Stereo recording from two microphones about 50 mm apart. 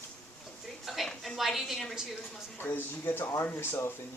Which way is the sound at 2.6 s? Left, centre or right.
Left.